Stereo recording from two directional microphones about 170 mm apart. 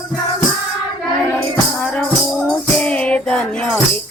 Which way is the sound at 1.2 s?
10° left (ahead or behind).